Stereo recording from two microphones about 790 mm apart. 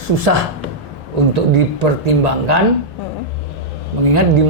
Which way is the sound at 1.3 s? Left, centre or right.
Right.